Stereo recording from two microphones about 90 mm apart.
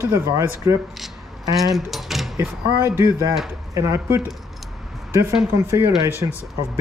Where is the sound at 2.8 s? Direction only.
30° right (ahead or behind).